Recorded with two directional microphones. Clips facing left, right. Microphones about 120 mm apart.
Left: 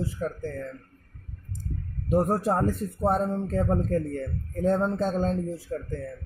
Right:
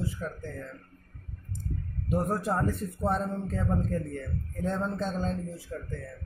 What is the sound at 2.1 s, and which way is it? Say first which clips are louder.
A man's voice: left 5 dB; 35° left (ahead or behind).